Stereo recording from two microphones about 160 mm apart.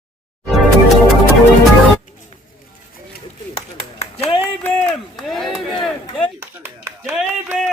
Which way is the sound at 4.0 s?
40° left (ahead or behind).